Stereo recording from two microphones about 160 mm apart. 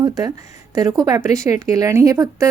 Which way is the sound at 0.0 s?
25° right (ahead or behind).